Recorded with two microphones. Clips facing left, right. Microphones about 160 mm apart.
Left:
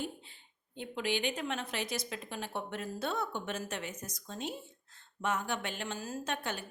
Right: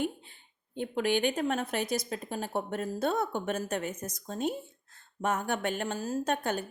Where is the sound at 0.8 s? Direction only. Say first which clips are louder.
Right 6 dB; 50° right (ahead or behind).